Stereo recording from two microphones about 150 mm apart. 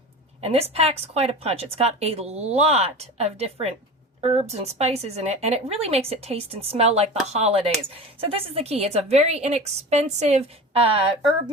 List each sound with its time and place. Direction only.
0.4 s a woman's voice: 40° right (ahead or behind)